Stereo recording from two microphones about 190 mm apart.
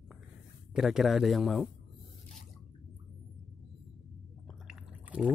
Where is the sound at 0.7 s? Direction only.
5° right (ahead or behind).